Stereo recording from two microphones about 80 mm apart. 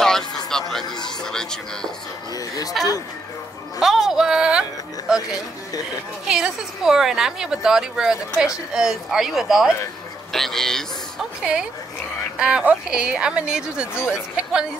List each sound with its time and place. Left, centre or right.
0.0 s music: centre
0.5 s a sound: centre
1.0 s speech: centre
2.3 s speech: left
3.8 s speech: centre
12.4 s speech: centre